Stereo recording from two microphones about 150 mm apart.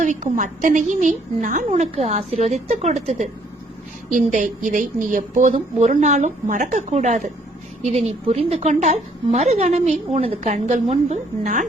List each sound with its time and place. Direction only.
0.0 s a woman's voice: 55° right (ahead or behind)
4.1 s a woman's voice: 60° right (ahead or behind)